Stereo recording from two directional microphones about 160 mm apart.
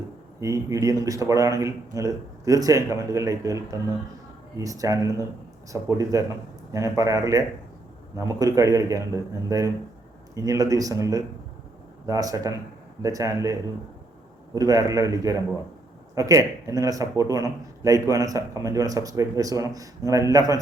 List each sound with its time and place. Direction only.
0.3 s speech: 20° right (ahead or behind)